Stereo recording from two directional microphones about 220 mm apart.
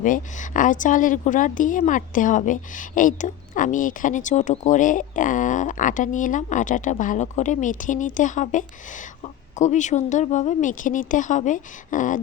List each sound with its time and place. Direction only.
0.0 s a woman's voice: 35° left (ahead or behind)